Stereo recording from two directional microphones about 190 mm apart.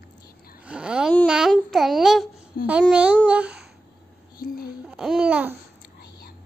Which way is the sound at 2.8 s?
5° right (ahead or behind).